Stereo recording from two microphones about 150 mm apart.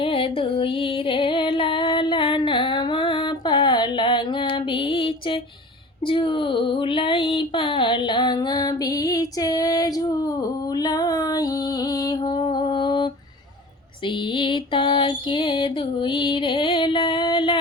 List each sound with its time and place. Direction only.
0.0 s music: 35° left (ahead or behind)
6.1 s a sound: 35° left (ahead or behind)
11.9 s mantra: 25° left (ahead or behind)
14.3 s music: 35° left (ahead or behind)